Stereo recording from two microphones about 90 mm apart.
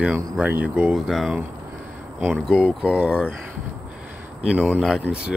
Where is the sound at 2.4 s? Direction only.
10° right (ahead or behind).